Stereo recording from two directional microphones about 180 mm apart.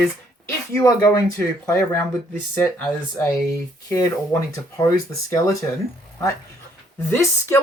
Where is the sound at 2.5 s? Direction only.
10° left (ahead or behind).